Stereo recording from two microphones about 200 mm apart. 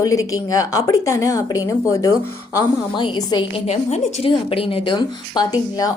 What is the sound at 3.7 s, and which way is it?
A woman's voice, 30° left (ahead or behind).